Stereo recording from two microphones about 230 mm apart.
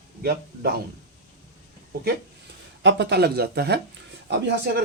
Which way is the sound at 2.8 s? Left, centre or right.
Right.